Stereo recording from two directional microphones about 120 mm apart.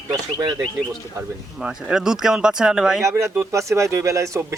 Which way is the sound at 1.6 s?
5° right (ahead or behind).